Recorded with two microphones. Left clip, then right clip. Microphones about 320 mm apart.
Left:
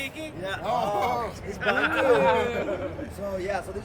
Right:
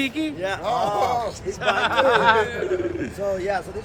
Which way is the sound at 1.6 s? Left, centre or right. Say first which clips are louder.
Right 4 dB; centre.